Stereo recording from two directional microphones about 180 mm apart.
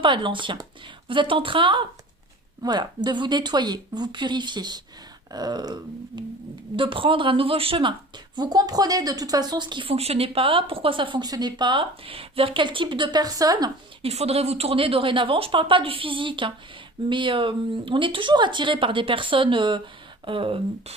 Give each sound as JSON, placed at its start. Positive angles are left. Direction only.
{"t": 0.0, "sound": "a woman's voice", "side_deg": -25}
{"t": 14.0, "sound": "a woman's voice", "side_deg": -35}